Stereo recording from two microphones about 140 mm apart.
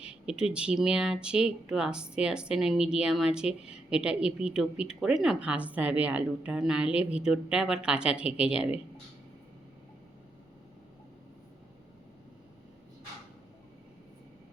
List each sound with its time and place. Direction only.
0.0 s a woman's voice: 5° right (ahead or behind)